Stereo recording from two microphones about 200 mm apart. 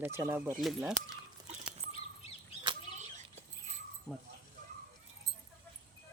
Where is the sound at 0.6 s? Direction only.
Centre (ahead or behind).